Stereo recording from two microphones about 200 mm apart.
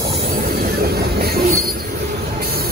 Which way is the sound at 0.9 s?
50° right (ahead or behind).